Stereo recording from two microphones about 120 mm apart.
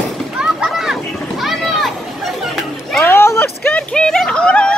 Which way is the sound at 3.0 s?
20° left (ahead or behind).